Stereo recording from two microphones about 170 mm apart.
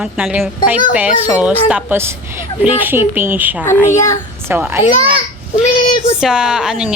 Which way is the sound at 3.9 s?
20° left (ahead or behind).